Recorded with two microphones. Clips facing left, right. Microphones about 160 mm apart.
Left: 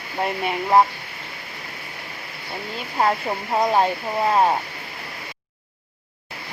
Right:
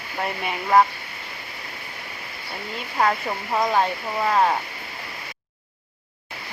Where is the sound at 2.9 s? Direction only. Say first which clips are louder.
Left 1 dB; 20° left (ahead or behind).